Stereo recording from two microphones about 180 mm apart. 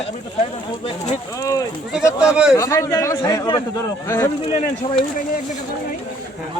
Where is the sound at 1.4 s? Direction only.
20° left (ahead or behind).